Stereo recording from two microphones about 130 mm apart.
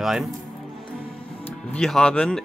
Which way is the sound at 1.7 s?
5° left (ahead or behind).